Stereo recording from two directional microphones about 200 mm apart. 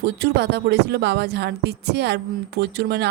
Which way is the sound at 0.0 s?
55° right (ahead or behind).